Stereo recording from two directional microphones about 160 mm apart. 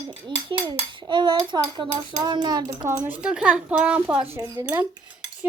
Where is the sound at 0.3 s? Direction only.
30° right (ahead or behind).